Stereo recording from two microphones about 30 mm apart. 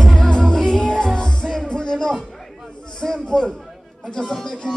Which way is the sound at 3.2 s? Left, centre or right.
Left.